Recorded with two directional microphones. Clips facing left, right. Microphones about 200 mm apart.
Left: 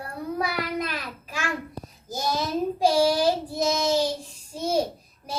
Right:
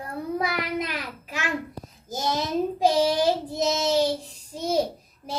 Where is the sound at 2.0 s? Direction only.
20° right (ahead or behind).